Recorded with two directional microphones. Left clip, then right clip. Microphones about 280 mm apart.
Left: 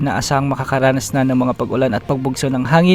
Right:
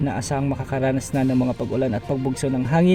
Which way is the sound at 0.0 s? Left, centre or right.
Left.